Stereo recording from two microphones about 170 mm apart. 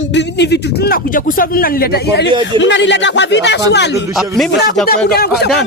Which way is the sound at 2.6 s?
90° left.